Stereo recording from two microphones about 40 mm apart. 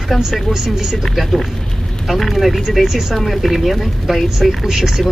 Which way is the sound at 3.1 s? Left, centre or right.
Centre.